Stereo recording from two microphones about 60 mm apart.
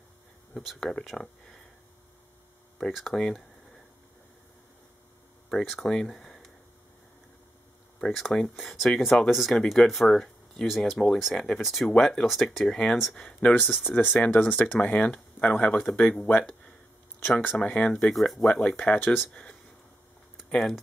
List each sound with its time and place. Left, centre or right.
0.6 s speech: centre
2.8 s speech: centre
5.5 s speech: centre
8.1 s speech: centre
13.2 s speech: centre
13.8 s speech: left
14.1 s speech: centre
14.5 s speech: left
17.6 s speech: centre
18.1 s speech: centre
18.5 s speech: centre
18.8 s speech: left
20.4 s speech: centre